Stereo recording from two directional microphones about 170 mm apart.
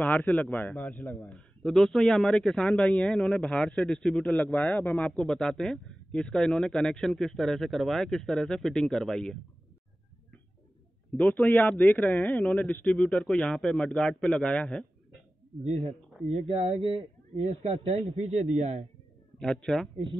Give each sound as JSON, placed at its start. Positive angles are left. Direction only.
{"t": 0.0, "sound": "a man's voice", "side_deg": 5}
{"t": 11.1, "sound": "a man's voice", "side_deg": 5}
{"t": 15.6, "sound": "a man's voice", "side_deg": -35}
{"t": 19.3, "sound": "speech", "side_deg": 5}